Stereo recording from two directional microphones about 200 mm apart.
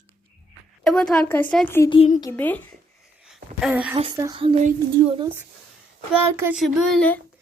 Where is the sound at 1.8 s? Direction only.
30° left (ahead or behind).